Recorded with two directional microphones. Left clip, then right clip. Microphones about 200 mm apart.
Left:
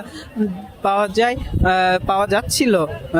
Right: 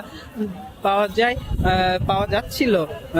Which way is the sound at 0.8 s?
30° left (ahead or behind).